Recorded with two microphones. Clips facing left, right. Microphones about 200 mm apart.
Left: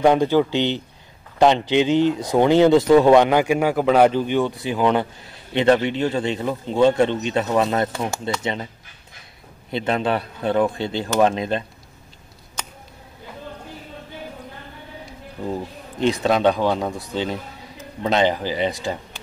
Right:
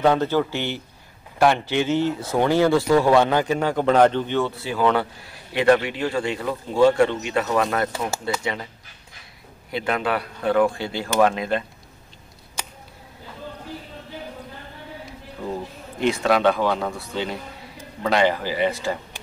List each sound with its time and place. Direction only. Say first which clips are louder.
0.0 s speech: left 3 dB; 15° left (ahead or behind)
7.9 s speech: left 1 dB; 5° right (ahead or behind)
8.4 s speech: left 2 dB; 20° left (ahead or behind)
9.7 s speech: left 2 dB; 25° left (ahead or behind)
16.1 s speech: left 1 dB; 20° left (ahead or behind)